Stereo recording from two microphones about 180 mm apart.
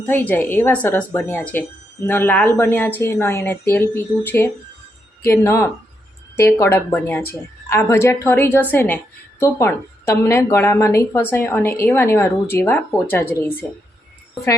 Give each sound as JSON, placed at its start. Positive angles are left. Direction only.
{"t": 0.0, "sound": "speech", "side_deg": 10}